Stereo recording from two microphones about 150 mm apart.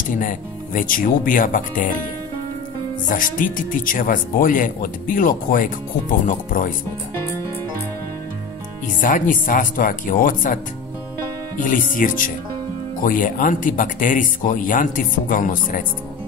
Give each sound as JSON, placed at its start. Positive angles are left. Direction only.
{"t": 0.2, "sound": "speech", "side_deg": 65}
{"t": 3.1, "sound": "speech", "side_deg": 65}
{"t": 9.0, "sound": "speech", "side_deg": 60}
{"t": 11.7, "sound": "speech", "side_deg": 60}